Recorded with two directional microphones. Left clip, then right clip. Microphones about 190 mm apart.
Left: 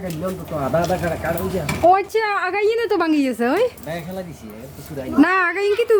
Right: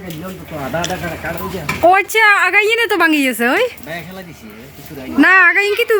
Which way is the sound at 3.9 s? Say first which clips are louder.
Right 1 dB; 65° left (ahead or behind).